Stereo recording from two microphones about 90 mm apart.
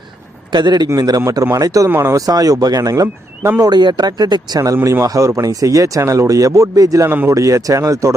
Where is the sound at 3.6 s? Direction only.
50° right (ahead or behind).